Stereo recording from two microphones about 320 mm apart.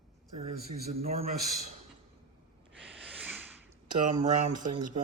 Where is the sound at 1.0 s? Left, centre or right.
Right.